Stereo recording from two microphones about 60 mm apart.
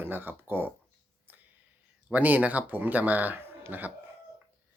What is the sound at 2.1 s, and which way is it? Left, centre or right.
Speech, right.